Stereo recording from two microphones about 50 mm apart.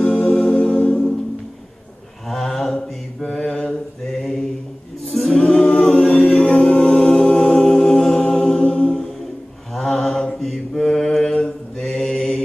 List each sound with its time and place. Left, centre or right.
0.0 s music: centre
2.2 s mantra: centre
5.1 s a capella: centre
8.2 s mantra: centre
9.8 s mantra: centre